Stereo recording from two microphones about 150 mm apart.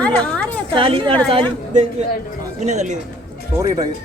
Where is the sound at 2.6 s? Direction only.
50° right (ahead or behind).